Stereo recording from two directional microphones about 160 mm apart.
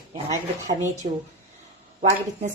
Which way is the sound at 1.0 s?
50° right (ahead or behind).